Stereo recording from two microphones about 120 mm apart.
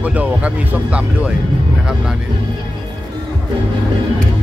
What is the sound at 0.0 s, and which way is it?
Speech, 10° right (ahead or behind).